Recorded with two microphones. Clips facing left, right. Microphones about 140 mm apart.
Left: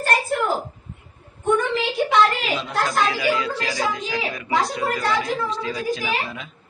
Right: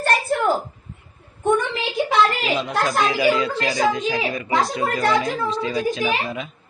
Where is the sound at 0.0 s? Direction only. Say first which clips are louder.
Right 2 dB; 70° right (ahead or behind).